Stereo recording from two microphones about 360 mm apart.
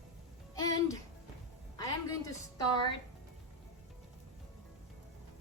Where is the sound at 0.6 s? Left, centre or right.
Centre.